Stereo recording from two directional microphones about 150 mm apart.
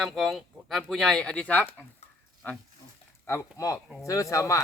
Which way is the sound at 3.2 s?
20° left (ahead or behind).